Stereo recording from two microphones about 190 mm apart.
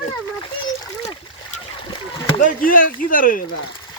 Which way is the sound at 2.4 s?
45° left (ahead or behind).